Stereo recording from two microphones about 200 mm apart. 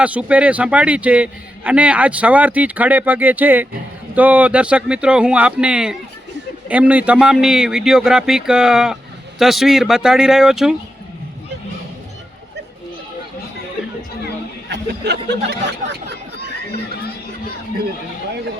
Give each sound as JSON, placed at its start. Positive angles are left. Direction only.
{"t": 0.0, "sound": "a man's voice", "side_deg": -5}
{"t": 14.7, "sound": "speech", "side_deg": -60}